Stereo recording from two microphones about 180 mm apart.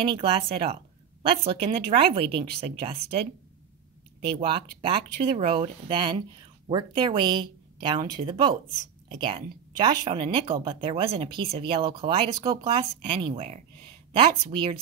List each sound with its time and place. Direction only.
0.0 s a woman's voice: 30° right (ahead or behind)